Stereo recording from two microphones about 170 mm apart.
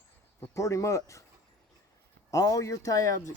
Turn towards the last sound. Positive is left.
turn(degrees=20)  # may be behind; listen again after turning